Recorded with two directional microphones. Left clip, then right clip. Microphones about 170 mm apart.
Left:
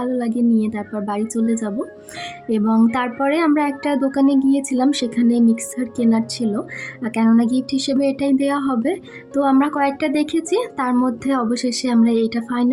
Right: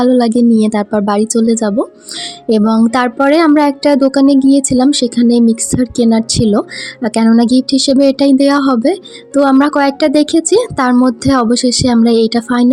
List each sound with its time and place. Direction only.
0.0 s a woman's voice: 45° right (ahead or behind)